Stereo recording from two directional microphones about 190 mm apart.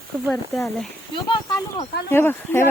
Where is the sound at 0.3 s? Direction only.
Centre (ahead or behind).